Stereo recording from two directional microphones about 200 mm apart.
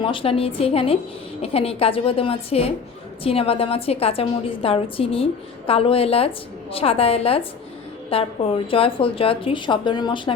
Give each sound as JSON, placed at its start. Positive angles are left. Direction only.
{"t": 0.0, "sound": "a woman's voice", "side_deg": 25}